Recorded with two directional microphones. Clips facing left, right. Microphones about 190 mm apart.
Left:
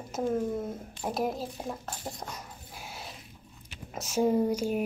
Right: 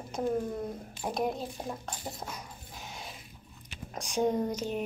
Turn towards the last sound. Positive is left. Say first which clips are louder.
# left 4 dB
turn(degrees=10)  # may be behind; listen again after turning